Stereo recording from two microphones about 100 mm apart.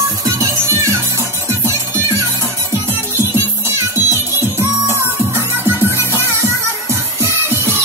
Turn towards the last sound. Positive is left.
turn(degrees=-20)  # may be behind; listen again after turning